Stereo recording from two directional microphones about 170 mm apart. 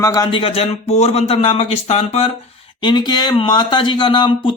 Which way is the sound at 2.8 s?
25° left (ahead or behind).